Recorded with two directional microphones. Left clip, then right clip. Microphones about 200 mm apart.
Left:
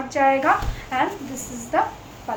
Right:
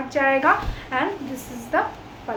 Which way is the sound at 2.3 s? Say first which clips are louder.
Left 1 dB; 15° right (ahead or behind).